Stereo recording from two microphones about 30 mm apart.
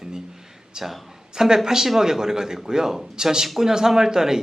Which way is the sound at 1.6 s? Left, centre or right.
Centre.